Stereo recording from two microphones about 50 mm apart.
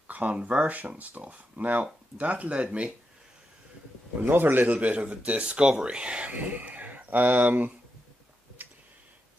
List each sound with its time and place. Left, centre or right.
0.1 s speech: right
4.2 s speech: right
4.6 s speech: right